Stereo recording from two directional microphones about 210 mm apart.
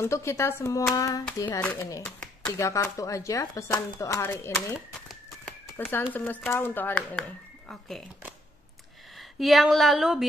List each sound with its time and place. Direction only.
0.0 s speech: 15° left (ahead or behind)
4.7 s a sound: centre (ahead or behind)
5.9 s speech: 10° left (ahead or behind)
9.4 s speech: centre (ahead or behind)